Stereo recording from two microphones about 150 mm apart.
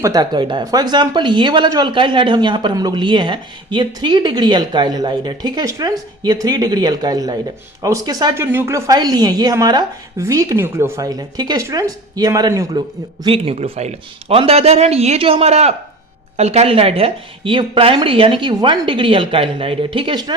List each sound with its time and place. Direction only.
0.0 s a woman's voice: 25° right (ahead or behind)
8.4 s a woman's voice: 15° right (ahead or behind)
13.2 s a woman's voice: 40° right (ahead or behind)